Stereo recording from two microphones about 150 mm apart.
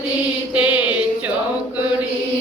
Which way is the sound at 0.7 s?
30° left (ahead or behind).